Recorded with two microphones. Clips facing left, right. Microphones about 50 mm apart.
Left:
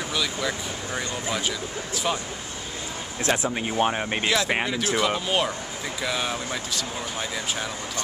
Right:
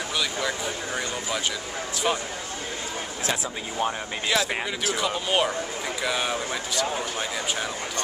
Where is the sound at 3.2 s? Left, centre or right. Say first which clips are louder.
Left 5 dB; left.